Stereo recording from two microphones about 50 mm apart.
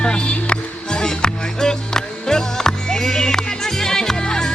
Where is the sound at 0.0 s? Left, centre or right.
Centre.